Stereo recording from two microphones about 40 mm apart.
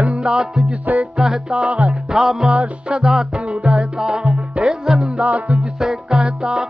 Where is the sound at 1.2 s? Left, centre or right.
Centre.